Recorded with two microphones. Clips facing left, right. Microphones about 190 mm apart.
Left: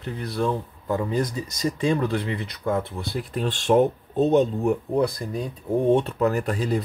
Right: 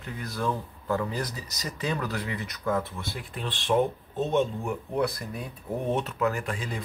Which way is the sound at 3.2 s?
45° left (ahead or behind).